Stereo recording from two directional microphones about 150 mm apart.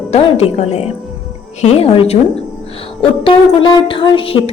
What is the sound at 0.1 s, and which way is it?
A woman's voice, 45° left (ahead or behind).